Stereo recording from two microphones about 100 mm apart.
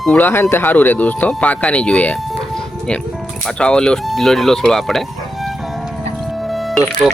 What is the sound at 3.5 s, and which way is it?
Speech, 10° left (ahead or behind).